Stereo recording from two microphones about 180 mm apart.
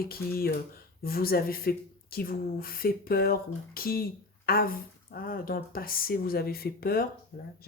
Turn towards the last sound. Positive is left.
turn(degrees=55)  # may be behind; listen again after turning